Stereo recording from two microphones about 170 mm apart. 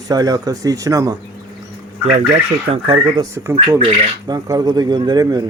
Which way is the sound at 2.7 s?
30° right (ahead or behind).